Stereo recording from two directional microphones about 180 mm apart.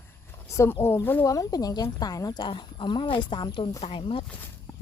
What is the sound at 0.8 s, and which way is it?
Speech, 15° left (ahead or behind).